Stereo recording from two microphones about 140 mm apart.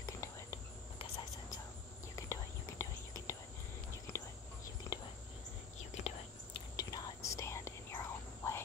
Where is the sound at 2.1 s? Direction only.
20° left (ahead or behind).